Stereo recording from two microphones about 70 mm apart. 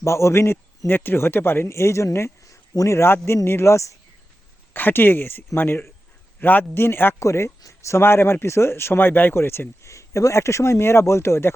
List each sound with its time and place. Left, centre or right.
0.0 s a man's voice: left
4.7 s speech: left
7.2 s speech: left